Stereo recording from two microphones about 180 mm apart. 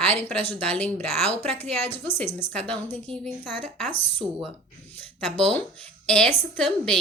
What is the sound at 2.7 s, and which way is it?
Speech, 5° left (ahead or behind).